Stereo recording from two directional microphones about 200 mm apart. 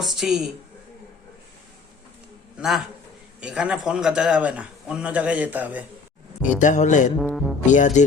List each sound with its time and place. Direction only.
0.0 s a woman's voice: centre (ahead or behind)
2.6 s a man's voice: centre (ahead or behind)
6.4 s speech: 40° left (ahead or behind)
7.2 s speech: centre (ahead or behind)
7.6 s speech: 40° left (ahead or behind)